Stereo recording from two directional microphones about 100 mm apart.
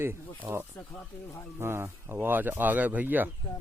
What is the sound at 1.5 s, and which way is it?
Speech, 25° right (ahead or behind).